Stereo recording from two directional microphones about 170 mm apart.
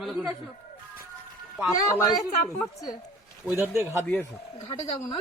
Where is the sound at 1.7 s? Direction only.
20° left (ahead or behind).